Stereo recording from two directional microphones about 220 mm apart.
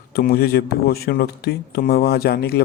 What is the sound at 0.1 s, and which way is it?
Speech, 45° left (ahead or behind).